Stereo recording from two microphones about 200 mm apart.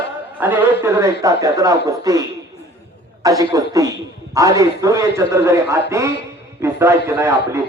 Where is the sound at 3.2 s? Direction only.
15° right (ahead or behind).